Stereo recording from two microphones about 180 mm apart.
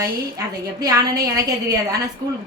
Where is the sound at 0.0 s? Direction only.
20° right (ahead or behind).